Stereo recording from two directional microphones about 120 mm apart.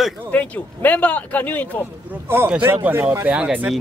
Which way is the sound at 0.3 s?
15° left (ahead or behind).